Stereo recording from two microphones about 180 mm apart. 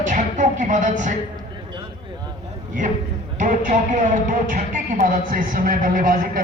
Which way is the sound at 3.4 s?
45° right (ahead or behind).